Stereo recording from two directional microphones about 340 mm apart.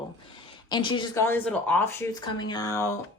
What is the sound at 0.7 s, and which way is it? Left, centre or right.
Speech, centre.